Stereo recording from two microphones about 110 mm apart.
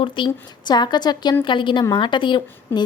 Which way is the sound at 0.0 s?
45° left (ahead or behind).